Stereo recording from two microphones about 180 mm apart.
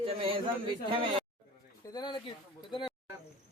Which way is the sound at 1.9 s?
25° left (ahead or behind).